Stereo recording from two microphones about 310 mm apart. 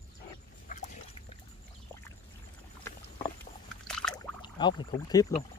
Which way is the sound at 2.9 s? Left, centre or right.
Centre.